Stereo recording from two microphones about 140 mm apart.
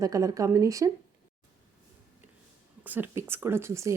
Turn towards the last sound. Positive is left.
turn(degrees=-20)  # may be behind; listen again after turning